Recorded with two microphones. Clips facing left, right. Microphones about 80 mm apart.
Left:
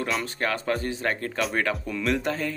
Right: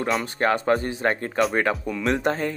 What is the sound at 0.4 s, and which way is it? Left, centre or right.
Speech, right.